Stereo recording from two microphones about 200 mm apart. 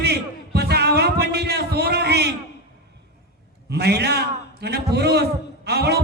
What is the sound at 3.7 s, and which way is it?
A man's voice, 55° right (ahead or behind).